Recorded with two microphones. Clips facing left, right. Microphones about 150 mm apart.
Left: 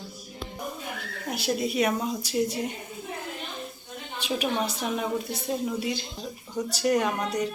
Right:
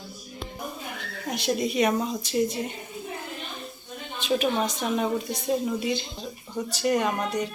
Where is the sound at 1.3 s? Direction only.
5° left (ahead or behind).